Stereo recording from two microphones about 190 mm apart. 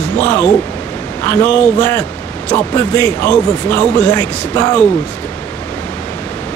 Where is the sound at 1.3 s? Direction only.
10° left (ahead or behind).